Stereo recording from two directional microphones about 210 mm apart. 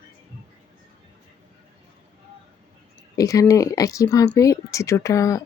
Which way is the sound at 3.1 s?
15° left (ahead or behind).